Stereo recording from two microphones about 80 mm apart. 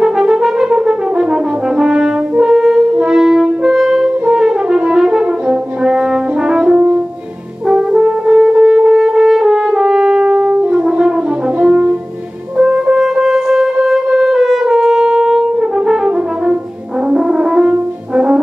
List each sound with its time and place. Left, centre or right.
0.0 s brass instrument: centre
2.9 s french horn: centre
11.6 s brass instrument: centre
12.5 s music: centre
15.9 s brass instrument: centre
17.1 s french horn: centre